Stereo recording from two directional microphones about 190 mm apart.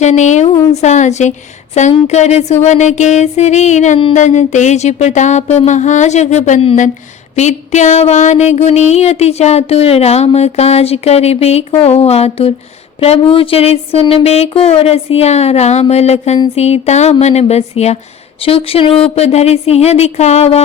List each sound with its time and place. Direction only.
0.0 s speech: 40° left (ahead or behind)